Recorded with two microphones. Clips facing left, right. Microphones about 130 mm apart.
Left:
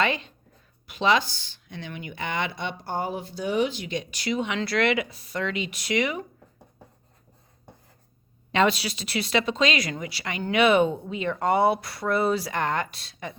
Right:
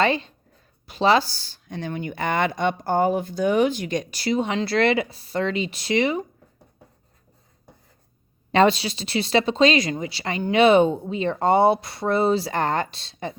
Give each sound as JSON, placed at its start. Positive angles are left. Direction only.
{"t": 0.0, "sound": "speech", "side_deg": -30}
{"t": 8.5, "sound": "speech", "side_deg": -30}